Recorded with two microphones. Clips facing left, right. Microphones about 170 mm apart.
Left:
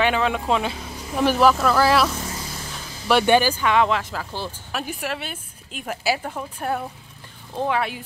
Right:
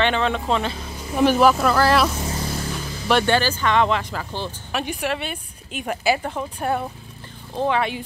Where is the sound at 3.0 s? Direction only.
10° left (ahead or behind).